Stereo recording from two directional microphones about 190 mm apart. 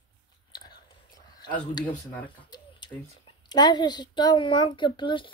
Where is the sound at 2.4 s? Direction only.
25° left (ahead or behind).